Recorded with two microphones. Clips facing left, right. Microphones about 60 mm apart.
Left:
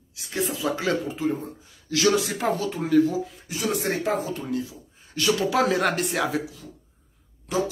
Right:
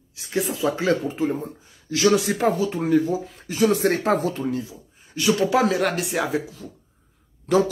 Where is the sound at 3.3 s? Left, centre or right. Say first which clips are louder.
Right 7 dB; right.